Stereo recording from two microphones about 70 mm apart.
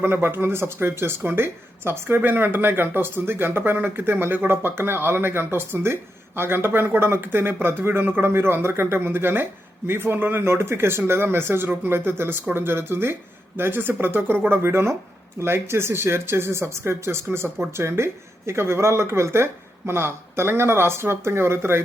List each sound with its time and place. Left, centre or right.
0.0 s speech: right